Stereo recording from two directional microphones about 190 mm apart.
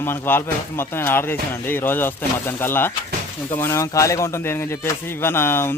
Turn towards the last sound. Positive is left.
turn(degrees=10)  # may be behind; listen again after turning